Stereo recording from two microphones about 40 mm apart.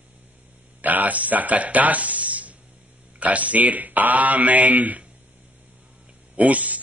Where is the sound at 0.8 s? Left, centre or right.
Right.